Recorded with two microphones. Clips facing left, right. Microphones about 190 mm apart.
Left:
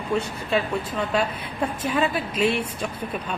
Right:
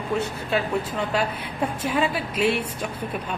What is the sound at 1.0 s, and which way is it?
A woman's voice, 10° right (ahead or behind).